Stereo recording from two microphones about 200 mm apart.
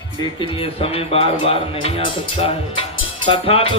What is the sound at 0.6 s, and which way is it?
A man's voice, 30° left (ahead or behind).